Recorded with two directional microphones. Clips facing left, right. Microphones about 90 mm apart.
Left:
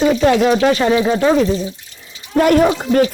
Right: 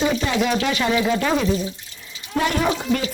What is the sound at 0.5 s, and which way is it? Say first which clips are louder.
Speech: left 7 dB; 40° left (ahead or behind).